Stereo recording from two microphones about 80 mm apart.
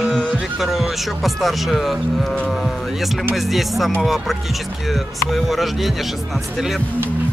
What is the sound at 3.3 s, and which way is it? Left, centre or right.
Speech, centre.